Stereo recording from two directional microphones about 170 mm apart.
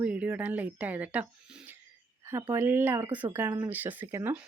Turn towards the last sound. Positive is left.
turn(degrees=-10)  # may be behind; listen again after turning